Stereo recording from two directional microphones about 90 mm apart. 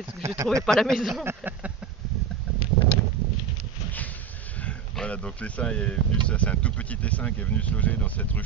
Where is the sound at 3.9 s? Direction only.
20° left (ahead or behind).